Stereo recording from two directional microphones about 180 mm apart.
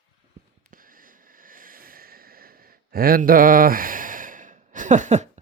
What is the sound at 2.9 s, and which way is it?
Sigh, 55° right (ahead or behind).